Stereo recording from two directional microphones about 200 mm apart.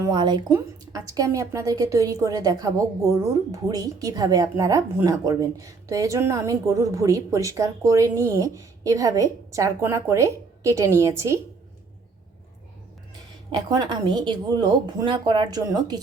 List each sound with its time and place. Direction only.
0.0 s a woman's voice: 20° right (ahead or behind)
13.5 s a woman's voice: 20° right (ahead or behind)